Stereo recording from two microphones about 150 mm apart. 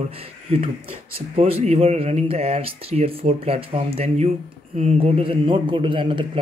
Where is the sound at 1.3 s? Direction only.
45° right (ahead or behind).